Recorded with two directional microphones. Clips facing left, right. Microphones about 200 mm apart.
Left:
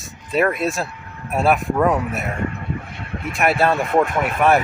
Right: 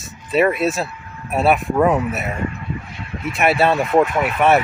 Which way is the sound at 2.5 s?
55° left (ahead or behind).